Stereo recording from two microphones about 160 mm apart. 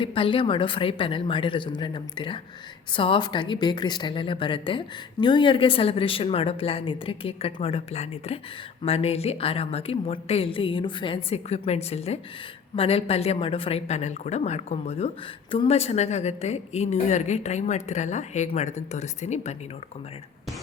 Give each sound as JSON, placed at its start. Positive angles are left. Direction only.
{"t": 0.0, "sound": "a woman's voice", "side_deg": 35}